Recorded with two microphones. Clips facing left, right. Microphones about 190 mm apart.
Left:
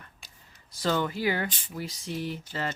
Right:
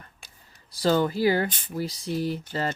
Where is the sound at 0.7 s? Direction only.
35° right (ahead or behind).